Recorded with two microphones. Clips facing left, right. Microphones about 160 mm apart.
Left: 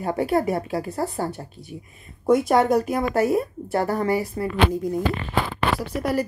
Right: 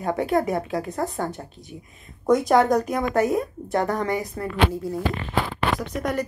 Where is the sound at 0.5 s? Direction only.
5° left (ahead or behind).